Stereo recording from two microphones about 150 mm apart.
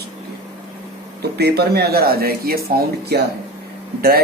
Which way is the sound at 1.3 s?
90° right.